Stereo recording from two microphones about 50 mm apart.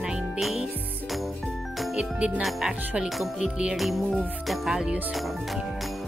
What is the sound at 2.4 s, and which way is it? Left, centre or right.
Speech, centre.